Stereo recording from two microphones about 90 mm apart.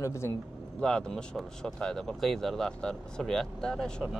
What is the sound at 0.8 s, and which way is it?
Speech, 10° left (ahead or behind).